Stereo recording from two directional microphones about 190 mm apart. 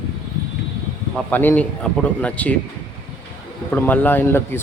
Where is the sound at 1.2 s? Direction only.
10° left (ahead or behind).